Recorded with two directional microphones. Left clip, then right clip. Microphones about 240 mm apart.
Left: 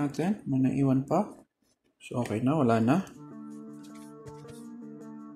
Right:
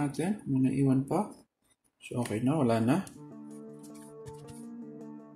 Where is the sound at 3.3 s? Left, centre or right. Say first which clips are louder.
Left 2 dB; centre.